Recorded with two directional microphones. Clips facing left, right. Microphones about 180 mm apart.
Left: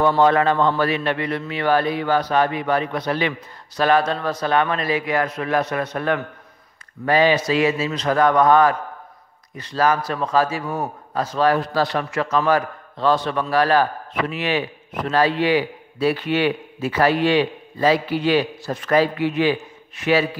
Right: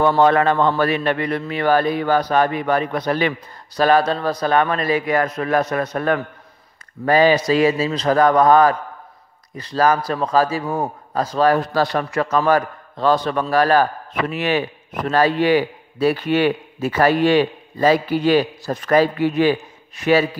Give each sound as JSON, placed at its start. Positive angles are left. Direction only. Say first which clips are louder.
{"t": 0.0, "sound": "a man's voice", "louder": "right 1 dB", "side_deg": -55}